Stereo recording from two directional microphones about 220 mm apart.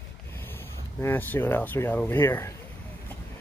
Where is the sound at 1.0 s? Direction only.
10° left (ahead or behind).